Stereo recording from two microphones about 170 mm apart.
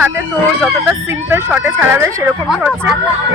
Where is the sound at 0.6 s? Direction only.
10° right (ahead or behind).